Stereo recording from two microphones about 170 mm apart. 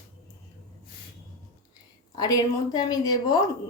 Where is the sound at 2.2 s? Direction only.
20° left (ahead or behind).